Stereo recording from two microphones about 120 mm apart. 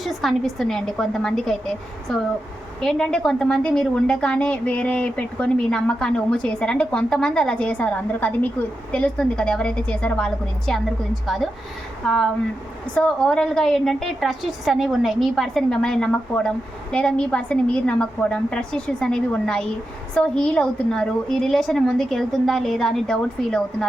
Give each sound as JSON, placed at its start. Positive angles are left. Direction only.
{"t": 0.0, "sound": "a woman's voice", "side_deg": 0}